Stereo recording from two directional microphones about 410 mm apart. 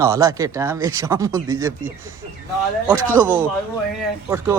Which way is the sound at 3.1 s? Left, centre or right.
Centre.